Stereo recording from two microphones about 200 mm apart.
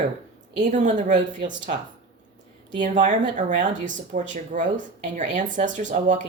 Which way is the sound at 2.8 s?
40° right (ahead or behind).